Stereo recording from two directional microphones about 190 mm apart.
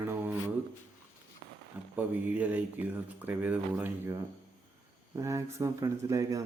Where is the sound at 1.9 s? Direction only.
10° right (ahead or behind).